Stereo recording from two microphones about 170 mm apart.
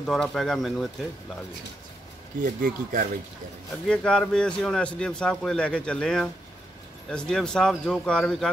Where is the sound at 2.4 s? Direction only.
55° right (ahead or behind).